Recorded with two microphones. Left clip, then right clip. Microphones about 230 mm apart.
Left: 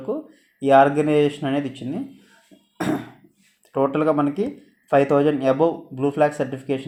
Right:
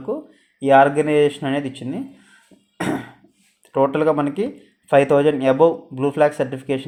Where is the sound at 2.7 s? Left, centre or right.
Right.